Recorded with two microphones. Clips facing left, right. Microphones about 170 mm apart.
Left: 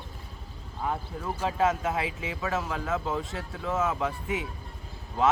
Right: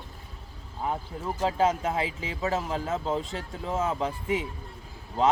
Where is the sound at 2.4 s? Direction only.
30° right (ahead or behind).